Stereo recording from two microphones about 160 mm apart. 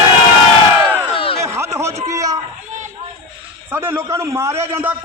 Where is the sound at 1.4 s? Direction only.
15° right (ahead or behind).